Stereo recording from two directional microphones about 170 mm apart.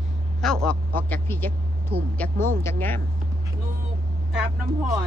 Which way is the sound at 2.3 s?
55° right (ahead or behind).